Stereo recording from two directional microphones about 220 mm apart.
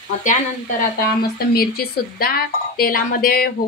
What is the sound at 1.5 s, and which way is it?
Speech, 45° left (ahead or behind).